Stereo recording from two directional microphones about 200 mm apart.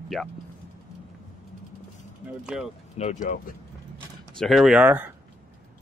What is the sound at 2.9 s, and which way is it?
Speech, 35° left (ahead or behind).